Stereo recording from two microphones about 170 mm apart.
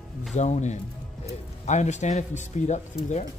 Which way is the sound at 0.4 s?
45° left (ahead or behind).